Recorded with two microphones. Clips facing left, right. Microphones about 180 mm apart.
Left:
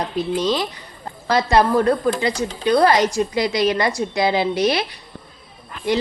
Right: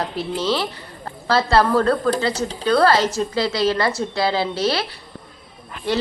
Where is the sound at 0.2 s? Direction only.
15° left (ahead or behind).